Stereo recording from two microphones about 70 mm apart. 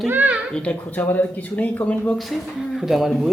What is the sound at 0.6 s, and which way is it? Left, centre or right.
Speech, left.